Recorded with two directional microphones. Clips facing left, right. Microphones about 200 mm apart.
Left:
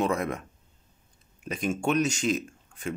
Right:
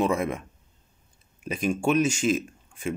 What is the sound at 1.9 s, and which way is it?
Speech, 40° left (ahead or behind).